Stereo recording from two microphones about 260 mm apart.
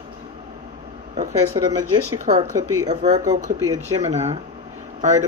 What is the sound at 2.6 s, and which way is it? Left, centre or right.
Speech, right.